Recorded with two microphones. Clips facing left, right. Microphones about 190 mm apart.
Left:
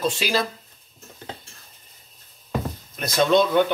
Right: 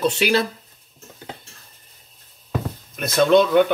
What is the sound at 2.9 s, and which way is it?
Speech, 60° right (ahead or behind).